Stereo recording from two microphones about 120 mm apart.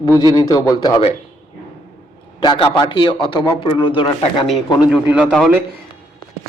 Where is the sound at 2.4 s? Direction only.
40° left (ahead or behind).